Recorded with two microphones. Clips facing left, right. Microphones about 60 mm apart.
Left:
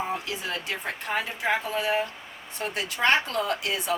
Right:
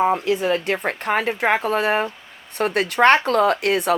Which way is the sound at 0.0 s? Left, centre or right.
Right.